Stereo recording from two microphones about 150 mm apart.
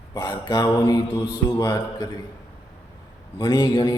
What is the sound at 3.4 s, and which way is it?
Speech, 25° left (ahead or behind).